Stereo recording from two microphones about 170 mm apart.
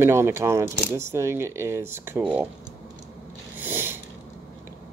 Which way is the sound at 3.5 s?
10° right (ahead or behind).